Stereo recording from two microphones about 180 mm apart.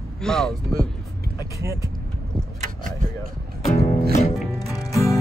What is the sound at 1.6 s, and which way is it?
Speech, 15° right (ahead or behind).